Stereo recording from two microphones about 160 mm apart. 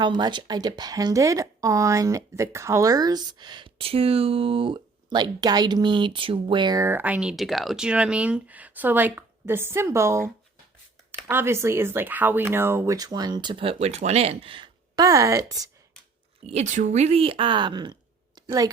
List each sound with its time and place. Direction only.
0.0 s speech: 30° right (ahead or behind)
16.5 s speech: 45° right (ahead or behind); by 17.9 s 30° right (ahead or behind)
18.3 s a sound: 25° right (ahead or behind)